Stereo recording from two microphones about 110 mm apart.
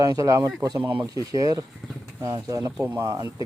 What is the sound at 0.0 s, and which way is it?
Speech, 30° right (ahead or behind).